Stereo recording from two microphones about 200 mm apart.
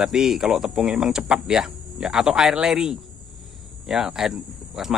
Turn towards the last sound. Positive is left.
turn(degrees=0)  # may be behind; listen again after turning